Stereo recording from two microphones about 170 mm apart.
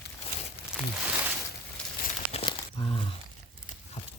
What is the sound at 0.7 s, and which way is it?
Crumpling, 5° right (ahead or behind).